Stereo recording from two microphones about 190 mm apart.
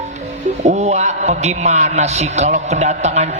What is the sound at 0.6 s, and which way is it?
A man's voice, 35° right (ahead or behind).